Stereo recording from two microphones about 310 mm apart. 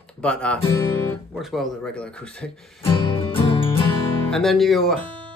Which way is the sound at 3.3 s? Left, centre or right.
Centre.